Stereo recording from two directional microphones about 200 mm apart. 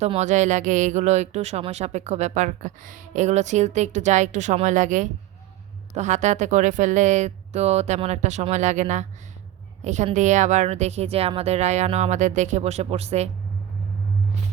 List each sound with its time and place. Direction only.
0.0 s speech: 35° right (ahead or behind)